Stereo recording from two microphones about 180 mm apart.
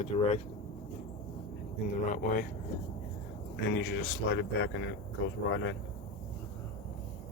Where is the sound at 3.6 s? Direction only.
80° left.